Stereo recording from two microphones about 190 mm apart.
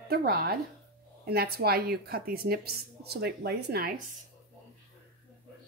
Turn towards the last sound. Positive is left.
turn(degrees=-55)  # may be behind; listen again after turning